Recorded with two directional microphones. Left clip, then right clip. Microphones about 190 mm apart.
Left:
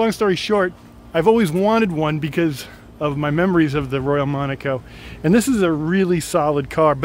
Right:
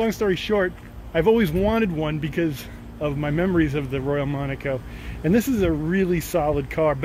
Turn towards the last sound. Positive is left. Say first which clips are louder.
# left 5 dB
turn(degrees=35)  # may be behind; listen again after turning